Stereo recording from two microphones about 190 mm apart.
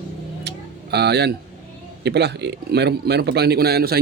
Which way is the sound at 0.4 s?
60° right (ahead or behind).